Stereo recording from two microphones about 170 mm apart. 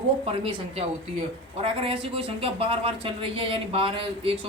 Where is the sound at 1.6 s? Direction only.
30° right (ahead or behind).